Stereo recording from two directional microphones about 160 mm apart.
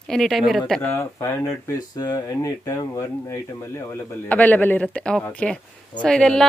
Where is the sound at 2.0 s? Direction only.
25° left (ahead or behind).